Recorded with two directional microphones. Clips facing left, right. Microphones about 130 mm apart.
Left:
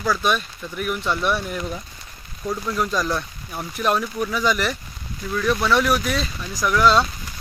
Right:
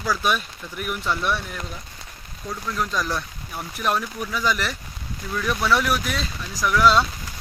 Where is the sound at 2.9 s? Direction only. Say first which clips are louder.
Left 3 dB; centre (ahead or behind).